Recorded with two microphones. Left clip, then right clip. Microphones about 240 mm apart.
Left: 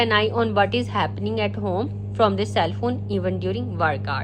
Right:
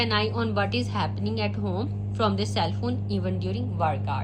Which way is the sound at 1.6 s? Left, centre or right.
Left.